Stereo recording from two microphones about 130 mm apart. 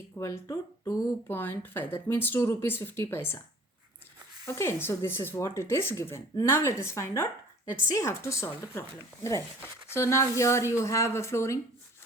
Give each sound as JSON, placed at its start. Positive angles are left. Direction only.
{"t": 0.2, "sound": "speech", "side_deg": 25}
{"t": 4.4, "sound": "speech", "side_deg": 20}
{"t": 9.9, "sound": "speech", "side_deg": 20}